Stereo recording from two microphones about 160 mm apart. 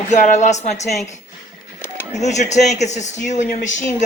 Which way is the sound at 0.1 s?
45° left (ahead or behind).